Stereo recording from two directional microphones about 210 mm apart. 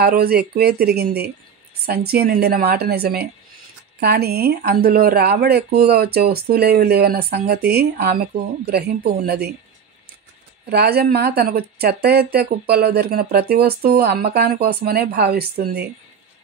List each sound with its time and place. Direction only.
0.0 s speech: 45° right (ahead or behind)
10.7 s speech: 50° right (ahead or behind)